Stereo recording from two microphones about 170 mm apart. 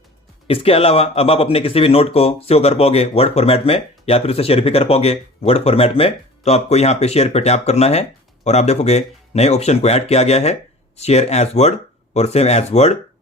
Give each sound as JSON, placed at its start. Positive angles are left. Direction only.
{"t": 0.4, "sound": "speech", "side_deg": 35}